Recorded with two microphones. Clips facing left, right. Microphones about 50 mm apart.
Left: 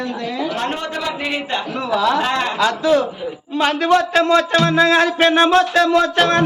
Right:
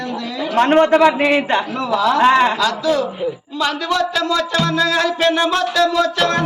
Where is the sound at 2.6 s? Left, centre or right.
Left.